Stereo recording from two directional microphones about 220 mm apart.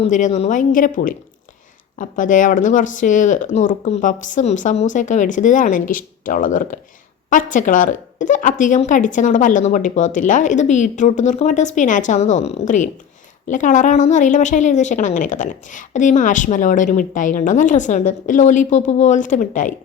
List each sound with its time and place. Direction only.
0.0 s a woman's voice: 30° left (ahead or behind)